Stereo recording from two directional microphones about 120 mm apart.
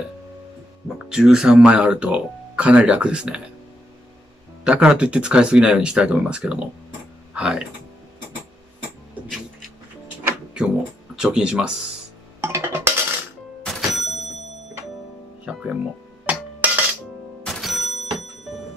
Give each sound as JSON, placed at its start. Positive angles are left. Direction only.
{"t": 0.8, "sound": "speech", "side_deg": -5}
{"t": 4.6, "sound": "speech", "side_deg": -5}
{"t": 11.1, "sound": "speech", "side_deg": -5}
{"t": 12.4, "sound": "music", "side_deg": -20}
{"t": 13.6, "sound": "a sound", "side_deg": 0}
{"t": 15.4, "sound": "music", "side_deg": -10}
{"t": 16.3, "sound": "a sound", "side_deg": -15}
{"t": 17.4, "sound": "music", "side_deg": 0}